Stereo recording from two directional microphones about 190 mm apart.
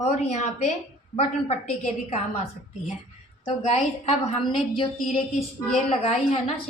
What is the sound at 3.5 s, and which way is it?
A woman's voice, 35° left (ahead or behind).